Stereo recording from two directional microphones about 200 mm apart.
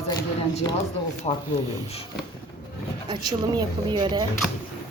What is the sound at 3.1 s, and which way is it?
Speech, 20° right (ahead or behind).